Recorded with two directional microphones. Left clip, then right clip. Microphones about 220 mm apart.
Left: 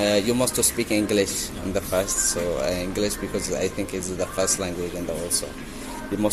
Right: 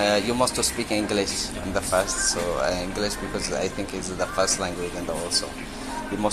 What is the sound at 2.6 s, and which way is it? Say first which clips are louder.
Speech: even; 40° left (ahead or behind).